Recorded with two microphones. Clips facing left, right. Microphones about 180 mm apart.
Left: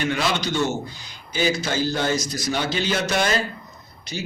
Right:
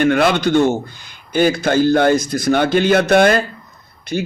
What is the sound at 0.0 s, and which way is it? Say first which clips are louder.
Speech: right 10 dB; 55° right (ahead or behind).